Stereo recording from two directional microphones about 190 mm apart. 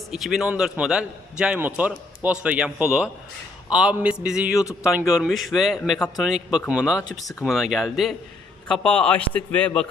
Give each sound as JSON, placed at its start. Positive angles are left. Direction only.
{"t": 0.1, "sound": "a man's voice", "side_deg": 0}
{"t": 7.0, "sound": "a man's voice", "side_deg": 20}
{"t": 7.4, "sound": "a man's voice", "side_deg": 0}